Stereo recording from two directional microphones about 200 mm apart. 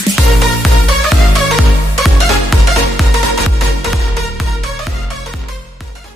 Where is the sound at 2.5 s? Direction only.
Centre (ahead or behind).